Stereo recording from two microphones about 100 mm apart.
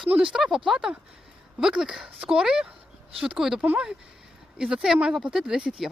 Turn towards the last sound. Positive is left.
turn(degrees=-10)  # may be behind; listen again after turning